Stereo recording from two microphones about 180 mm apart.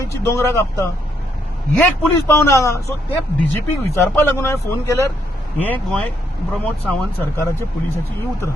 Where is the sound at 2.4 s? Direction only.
15° left (ahead or behind).